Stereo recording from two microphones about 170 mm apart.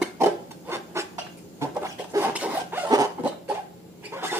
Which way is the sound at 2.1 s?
10° right (ahead or behind).